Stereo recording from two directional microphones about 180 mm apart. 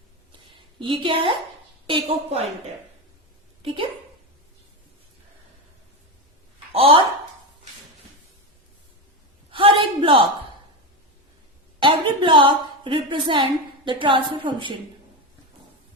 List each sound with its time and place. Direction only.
0.8 s a woman's voice: 25° right (ahead or behind)
6.7 s a woman's voice: 30° right (ahead or behind)
9.5 s a sound: 30° right (ahead or behind)
11.8 s a woman's voice: 25° right (ahead or behind)